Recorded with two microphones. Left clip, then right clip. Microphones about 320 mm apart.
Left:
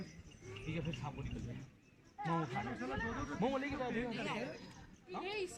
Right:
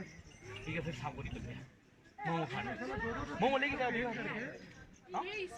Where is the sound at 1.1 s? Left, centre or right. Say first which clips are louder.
Right 4 dB; right.